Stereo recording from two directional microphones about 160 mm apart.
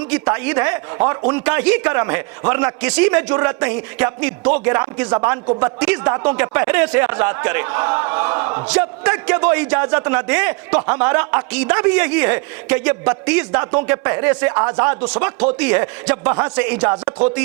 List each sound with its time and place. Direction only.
0.0 s speech: 10° right (ahead or behind)